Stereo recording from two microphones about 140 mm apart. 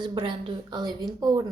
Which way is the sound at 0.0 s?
35° right (ahead or behind).